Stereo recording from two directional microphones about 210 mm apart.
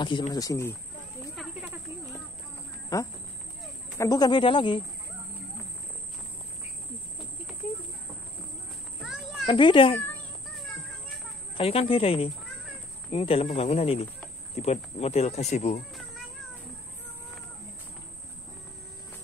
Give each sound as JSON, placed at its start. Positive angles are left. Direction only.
{"t": 0.0, "sound": "speech", "side_deg": 20}
{"t": 1.3, "sound": "snake", "side_deg": -5}
{"t": 2.9, "sound": "speech", "side_deg": 15}
{"t": 9.0, "sound": "children playing", "side_deg": 0}
{"t": 9.5, "sound": "speech", "side_deg": 25}
{"t": 10.5, "sound": "children playing", "side_deg": 0}
{"t": 11.5, "sound": "speech", "side_deg": 25}